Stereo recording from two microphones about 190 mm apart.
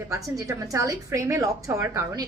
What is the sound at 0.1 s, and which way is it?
A woman's voice, 15° right (ahead or behind).